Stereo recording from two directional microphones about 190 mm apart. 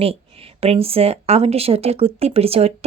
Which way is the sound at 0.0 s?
30° right (ahead or behind).